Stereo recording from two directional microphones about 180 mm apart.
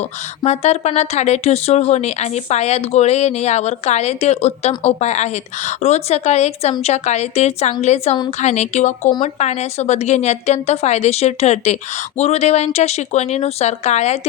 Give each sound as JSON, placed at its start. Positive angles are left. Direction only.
{"t": 0.0, "sound": "a woman's voice", "side_deg": 35}